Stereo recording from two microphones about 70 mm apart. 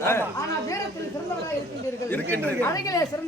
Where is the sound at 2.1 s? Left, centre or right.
Left.